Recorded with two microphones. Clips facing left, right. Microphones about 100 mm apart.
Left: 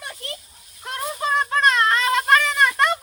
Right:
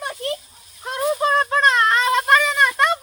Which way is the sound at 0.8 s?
15° right (ahead or behind).